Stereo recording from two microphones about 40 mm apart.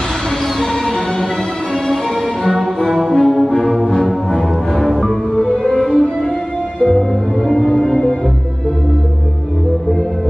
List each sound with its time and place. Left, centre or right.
2.8 s brass instrument: centre
5.3 s music: left
5.6 s music: centre